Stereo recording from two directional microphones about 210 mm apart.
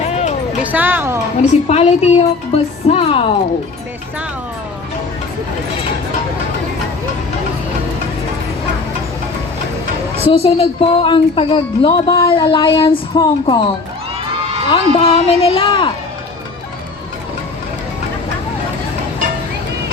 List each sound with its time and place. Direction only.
0.1 s music: 30° left (ahead or behind)
0.6 s speech: 10° right (ahead or behind)
1.4 s a woman's voice: 30° left (ahead or behind)
10.2 s a woman's voice: 30° left (ahead or behind)
14.7 s a woman's voice: 30° left (ahead or behind)